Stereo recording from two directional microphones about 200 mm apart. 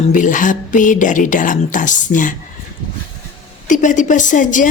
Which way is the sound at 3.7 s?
40° left (ahead or behind).